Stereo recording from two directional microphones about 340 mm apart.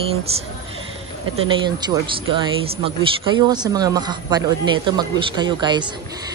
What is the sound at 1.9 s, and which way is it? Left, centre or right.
Speech, centre.